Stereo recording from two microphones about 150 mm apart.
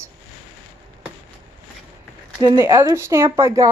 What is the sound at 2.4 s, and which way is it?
A woman's voice, 20° right (ahead or behind).